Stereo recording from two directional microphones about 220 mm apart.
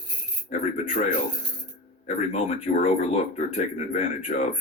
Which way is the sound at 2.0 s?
30° left (ahead or behind).